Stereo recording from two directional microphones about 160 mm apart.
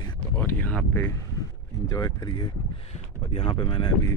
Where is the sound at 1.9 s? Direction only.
25° left (ahead or behind).